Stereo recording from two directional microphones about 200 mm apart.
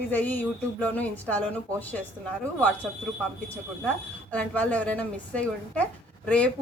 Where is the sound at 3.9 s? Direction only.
5° left (ahead or behind).